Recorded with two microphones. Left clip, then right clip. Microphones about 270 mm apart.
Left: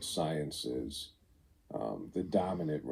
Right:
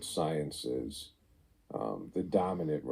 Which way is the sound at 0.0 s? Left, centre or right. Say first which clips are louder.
Right 2 dB; right.